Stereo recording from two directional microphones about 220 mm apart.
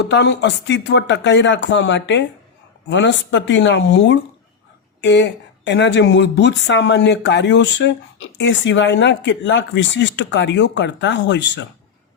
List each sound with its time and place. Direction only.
0.0 s speech: 50° left (ahead or behind)